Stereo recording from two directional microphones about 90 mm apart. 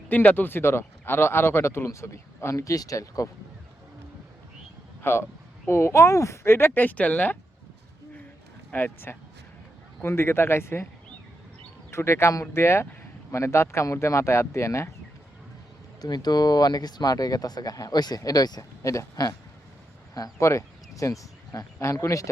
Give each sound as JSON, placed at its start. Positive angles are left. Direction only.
{"t": 0.1, "sound": "speech", "side_deg": 20}
{"t": 5.0, "sound": "speech", "side_deg": 25}
{"t": 8.7, "sound": "speech", "side_deg": 25}
{"t": 11.9, "sound": "speech", "side_deg": 30}
{"t": 16.0, "sound": "speech", "side_deg": 50}
{"t": 18.8, "sound": "speech", "side_deg": 35}